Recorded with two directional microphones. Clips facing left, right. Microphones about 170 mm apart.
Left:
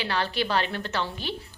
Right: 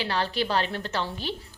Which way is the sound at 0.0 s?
35° right (ahead or behind).